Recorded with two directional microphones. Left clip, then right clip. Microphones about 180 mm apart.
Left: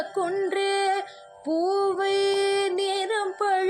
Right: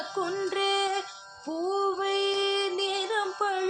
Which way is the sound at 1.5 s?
20° left (ahead or behind).